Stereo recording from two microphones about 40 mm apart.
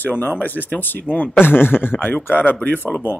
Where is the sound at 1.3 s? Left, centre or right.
Left.